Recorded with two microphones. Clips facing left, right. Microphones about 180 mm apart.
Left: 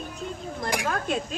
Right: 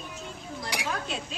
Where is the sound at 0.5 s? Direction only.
50° left (ahead or behind).